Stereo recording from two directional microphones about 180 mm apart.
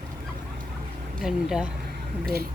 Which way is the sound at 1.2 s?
5° right (ahead or behind).